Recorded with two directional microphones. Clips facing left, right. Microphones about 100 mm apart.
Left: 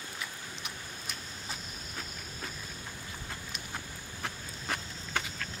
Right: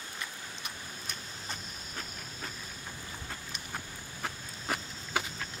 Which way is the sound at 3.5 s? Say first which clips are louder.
Even; 5° right (ahead or behind).